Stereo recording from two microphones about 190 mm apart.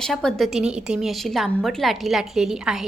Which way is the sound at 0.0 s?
5° left (ahead or behind).